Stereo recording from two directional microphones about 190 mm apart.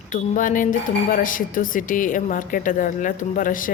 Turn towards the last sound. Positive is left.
turn(degrees=45)  # may be behind; listen again after turning